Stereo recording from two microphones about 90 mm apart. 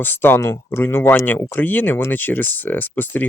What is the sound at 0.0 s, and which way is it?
Speech, 25° left (ahead or behind).